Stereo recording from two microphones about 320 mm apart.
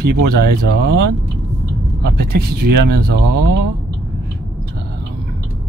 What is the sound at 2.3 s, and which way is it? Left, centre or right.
Speech, right.